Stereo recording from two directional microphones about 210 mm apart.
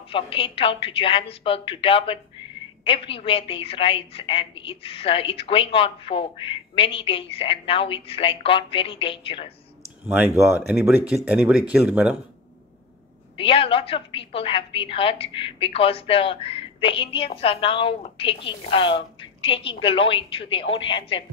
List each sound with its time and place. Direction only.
0.1 s a woman's voice: 25° left (ahead or behind)
10.0 s speech: 10° right (ahead or behind)
13.4 s a woman's voice: 25° left (ahead or behind)